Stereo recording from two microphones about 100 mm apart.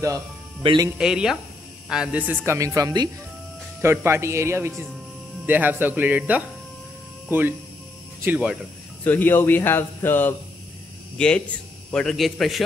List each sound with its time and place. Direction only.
0.6 s speech: 55° right (ahead or behind)
0.9 s speech: 5° right (ahead or behind)
2.4 s speech: 30° right (ahead or behind)
3.8 s speech: 25° right (ahead or behind)
9.0 s speech: 20° left (ahead or behind)
11.1 s a man's voice: 10° left (ahead or behind)